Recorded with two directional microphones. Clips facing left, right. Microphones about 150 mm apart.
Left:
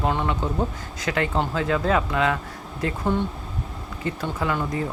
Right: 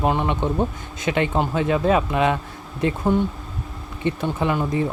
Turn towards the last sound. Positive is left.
turn(degrees=-20)  # may be behind; listen again after turning